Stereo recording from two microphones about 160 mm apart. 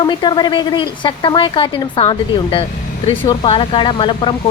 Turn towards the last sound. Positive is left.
turn(degrees=30)  # may be behind; listen again after turning